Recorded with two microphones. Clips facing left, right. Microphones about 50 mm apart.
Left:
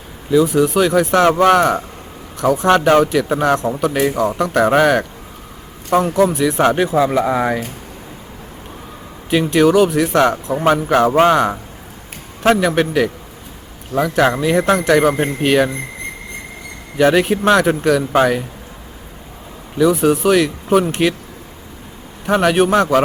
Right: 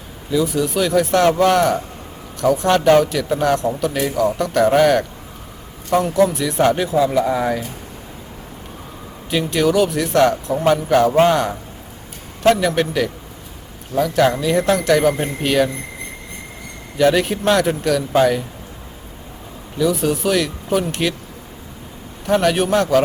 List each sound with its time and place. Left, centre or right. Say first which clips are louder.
0.3 s a man's voice: left 5 dB; left
6.7 s speech: left 2 dB; left
9.3 s a man's voice: left 4 dB; left
17.0 s a man's voice: left 2 dB; left
19.8 s a man's voice: left 5 dB; left
22.3 s a man's voice: left 3 dB; left